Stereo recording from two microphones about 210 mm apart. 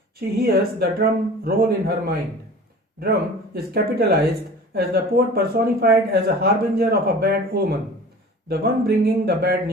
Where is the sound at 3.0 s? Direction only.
45° right (ahead or behind).